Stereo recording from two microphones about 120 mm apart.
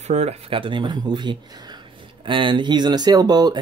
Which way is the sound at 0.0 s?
65° right (ahead or behind).